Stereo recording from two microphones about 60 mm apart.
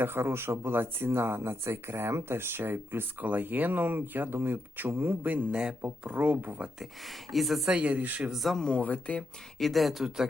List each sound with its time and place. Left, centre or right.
0.0 s speech: right
5.5 s speech: centre
6.7 s speech: centre
7.7 s speech: centre
8.2 s speech: centre
8.7 s speech: left
9.6 s speech: centre